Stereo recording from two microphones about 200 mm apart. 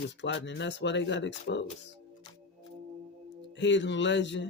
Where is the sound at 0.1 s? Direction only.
65° left (ahead or behind).